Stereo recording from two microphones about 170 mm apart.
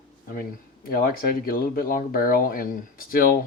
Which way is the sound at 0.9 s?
60° left (ahead or behind).